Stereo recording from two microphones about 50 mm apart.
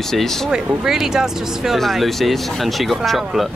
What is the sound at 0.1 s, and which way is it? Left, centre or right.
Speech, centre.